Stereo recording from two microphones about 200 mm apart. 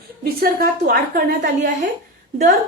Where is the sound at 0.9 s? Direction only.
45° right (ahead or behind).